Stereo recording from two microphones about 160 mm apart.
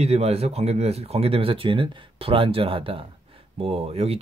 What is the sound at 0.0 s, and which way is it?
Speech, 40° right (ahead or behind).